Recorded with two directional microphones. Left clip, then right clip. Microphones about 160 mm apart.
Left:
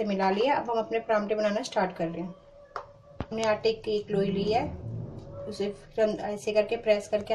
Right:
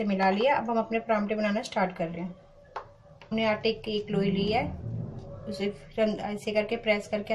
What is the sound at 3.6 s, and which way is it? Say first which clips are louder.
Speech: left 2 dB; 25° left (ahead or behind).